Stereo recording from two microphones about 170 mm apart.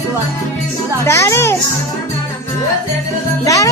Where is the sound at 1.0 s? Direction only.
15° left (ahead or behind).